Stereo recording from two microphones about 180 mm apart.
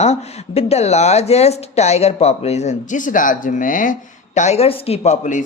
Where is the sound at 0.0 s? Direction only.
35° left (ahead or behind).